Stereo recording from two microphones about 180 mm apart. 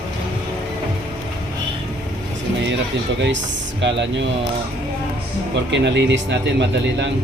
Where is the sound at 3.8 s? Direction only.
75° right (ahead or behind).